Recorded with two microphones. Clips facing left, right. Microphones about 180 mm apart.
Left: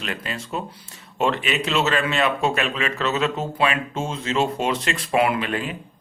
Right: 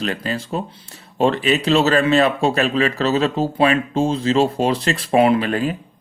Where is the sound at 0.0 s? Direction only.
35° right (ahead or behind).